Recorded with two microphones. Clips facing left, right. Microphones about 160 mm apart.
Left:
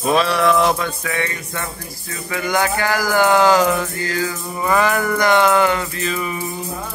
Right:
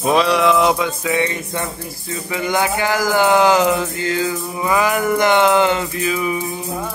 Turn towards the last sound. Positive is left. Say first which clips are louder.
# right 3 dB
turn(degrees=-5)  # may be behind; listen again after turning